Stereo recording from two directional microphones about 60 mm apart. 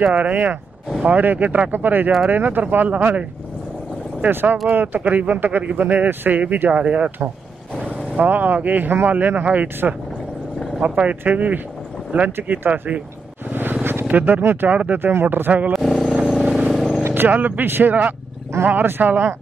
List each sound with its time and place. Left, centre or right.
0.1 s speech: right
4.3 s speech: right
13.5 s vehicle: right
14.0 s speech: right
15.7 s vehicle: centre
17.0 s speech: right